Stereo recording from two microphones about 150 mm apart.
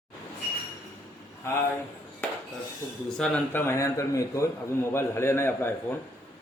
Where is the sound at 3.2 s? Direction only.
15° left (ahead or behind).